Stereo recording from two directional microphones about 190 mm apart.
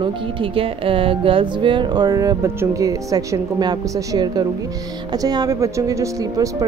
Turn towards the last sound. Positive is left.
turn(degrees=-20)  # may be behind; listen again after turning